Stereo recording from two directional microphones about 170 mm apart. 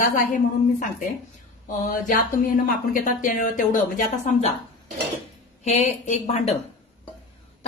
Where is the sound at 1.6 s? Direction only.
50° left (ahead or behind).